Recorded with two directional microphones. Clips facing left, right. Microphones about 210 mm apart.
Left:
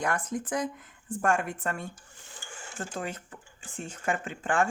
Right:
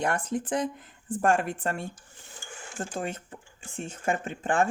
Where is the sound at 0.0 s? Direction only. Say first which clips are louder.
Right 2 dB; 30° right (ahead or behind).